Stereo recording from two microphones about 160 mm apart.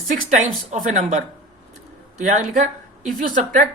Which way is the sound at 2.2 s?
50° right (ahead or behind).